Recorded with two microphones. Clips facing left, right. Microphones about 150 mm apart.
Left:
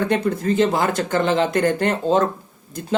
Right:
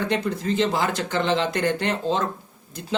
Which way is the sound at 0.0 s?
50° left (ahead or behind).